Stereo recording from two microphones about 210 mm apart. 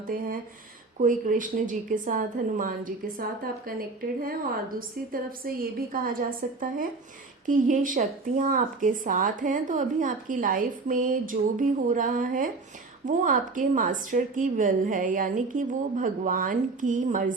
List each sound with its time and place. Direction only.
0.1 s a woman's voice: 40° right (ahead or behind)